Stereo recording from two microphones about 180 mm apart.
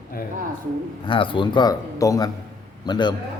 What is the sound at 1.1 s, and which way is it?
Speech, 30° left (ahead or behind).